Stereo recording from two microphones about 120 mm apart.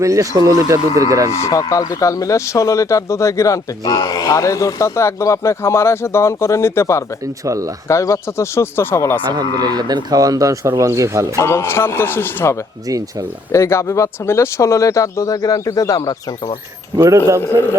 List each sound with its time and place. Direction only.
0.0 s speech: 25° right (ahead or behind)
1.3 s speech: 25° left (ahead or behind)
7.4 s speech: 25° right (ahead or behind)
7.9 s speech: 25° left (ahead or behind)
9.2 s speech: 35° right (ahead or behind)
11.3 s speech: 20° left (ahead or behind)
17.0 s speech: 20° right (ahead or behind)
17.4 s speech: 20° left (ahead or behind)